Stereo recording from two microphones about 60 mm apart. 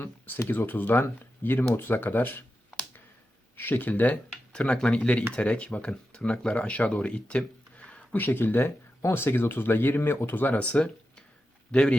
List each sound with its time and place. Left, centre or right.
0.0 s speech: left
3.5 s speech: left; by 8.2 s centre
8.2 s speech: left
10.6 s a man's voice: left